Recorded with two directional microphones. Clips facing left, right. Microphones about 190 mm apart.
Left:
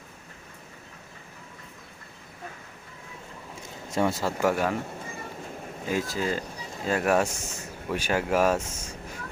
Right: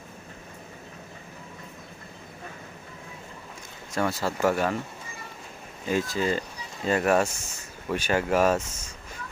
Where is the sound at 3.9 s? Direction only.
20° left (ahead or behind).